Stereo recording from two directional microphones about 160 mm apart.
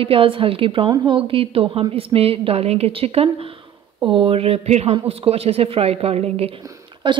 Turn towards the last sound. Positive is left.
turn(degrees=-30)  # may be behind; listen again after turning